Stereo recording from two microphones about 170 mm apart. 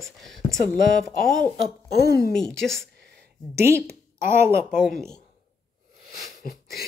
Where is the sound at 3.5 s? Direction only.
15° right (ahead or behind).